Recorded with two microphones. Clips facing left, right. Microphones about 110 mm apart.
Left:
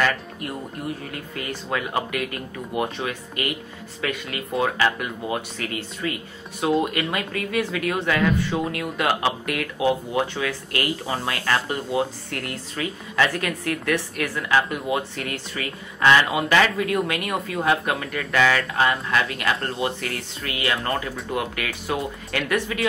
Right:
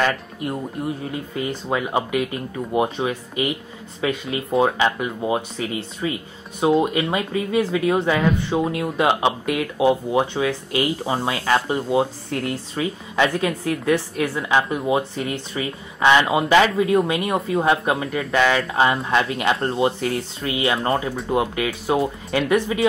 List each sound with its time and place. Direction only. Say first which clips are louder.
0.0 s speech: right 2 dB; 20° right (ahead or behind)
16.7 s speech: right 5 dB; 30° right (ahead or behind)